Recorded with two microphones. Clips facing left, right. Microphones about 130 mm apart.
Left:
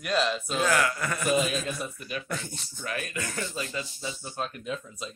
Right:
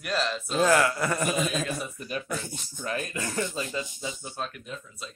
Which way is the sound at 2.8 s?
30° right (ahead or behind).